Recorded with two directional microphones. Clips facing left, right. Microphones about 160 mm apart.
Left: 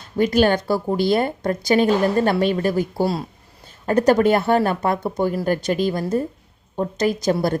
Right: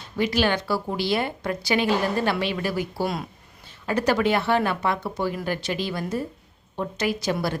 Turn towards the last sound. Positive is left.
turn(degrees=45)  # may be behind; listen again after turning